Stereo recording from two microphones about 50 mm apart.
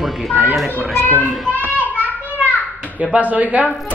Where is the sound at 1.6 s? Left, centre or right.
Right.